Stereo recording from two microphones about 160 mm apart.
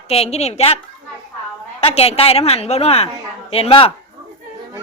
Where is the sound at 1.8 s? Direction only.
40° left (ahead or behind).